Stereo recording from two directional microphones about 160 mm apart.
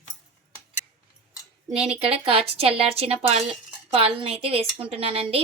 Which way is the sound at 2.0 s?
35° right (ahead or behind).